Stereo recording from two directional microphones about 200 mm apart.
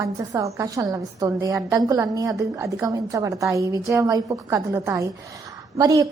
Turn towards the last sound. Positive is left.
turn(degrees=-15)  # may be behind; listen again after turning